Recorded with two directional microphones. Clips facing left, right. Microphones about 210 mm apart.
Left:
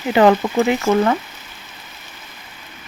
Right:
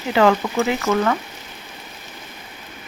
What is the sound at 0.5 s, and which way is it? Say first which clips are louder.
Frying: left 4 dB; 30° left (ahead or behind).